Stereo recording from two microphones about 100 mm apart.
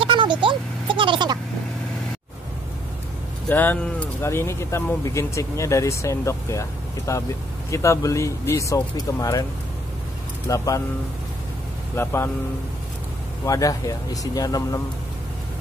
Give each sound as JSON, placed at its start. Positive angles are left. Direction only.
{"t": 0.0, "sound": "vehicle", "side_deg": -55}
{"t": 3.4, "sound": "speech", "side_deg": 20}
{"t": 10.5, "sound": "speech", "side_deg": 35}
{"t": 11.9, "sound": "speech", "side_deg": 25}
{"t": 13.5, "sound": "speech", "side_deg": 35}